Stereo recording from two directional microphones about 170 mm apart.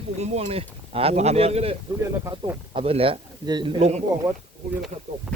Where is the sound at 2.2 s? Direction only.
15° right (ahead or behind).